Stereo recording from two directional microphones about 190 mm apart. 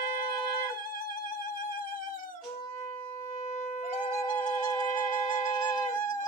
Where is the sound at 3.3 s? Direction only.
35° left (ahead or behind).